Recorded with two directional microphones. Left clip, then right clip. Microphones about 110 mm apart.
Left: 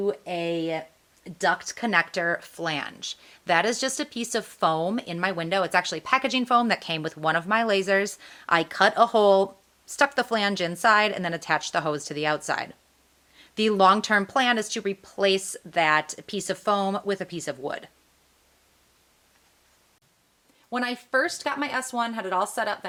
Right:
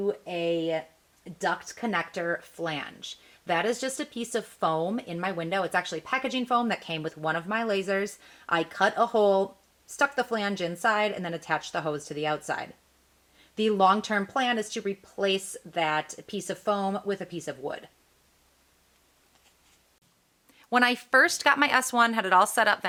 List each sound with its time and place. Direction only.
0.0 s speech: 45° left (ahead or behind)
20.7 s speech: 40° right (ahead or behind)